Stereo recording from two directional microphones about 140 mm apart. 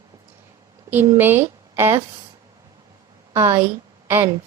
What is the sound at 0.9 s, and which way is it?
Speech, 15° right (ahead or behind).